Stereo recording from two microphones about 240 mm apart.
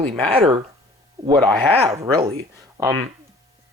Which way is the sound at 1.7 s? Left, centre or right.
Right.